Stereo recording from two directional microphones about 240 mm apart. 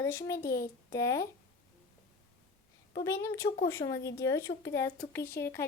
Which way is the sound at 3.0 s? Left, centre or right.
Centre.